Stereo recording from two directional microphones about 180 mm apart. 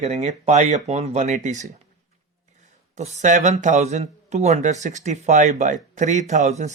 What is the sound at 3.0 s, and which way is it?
Speech, 40° right (ahead or behind).